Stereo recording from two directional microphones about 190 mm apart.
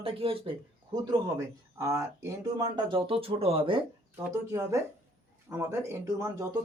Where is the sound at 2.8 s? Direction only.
25° right (ahead or behind).